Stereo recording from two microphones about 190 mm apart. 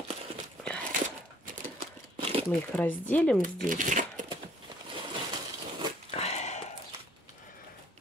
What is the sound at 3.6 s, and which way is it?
Speech, 45° right (ahead or behind).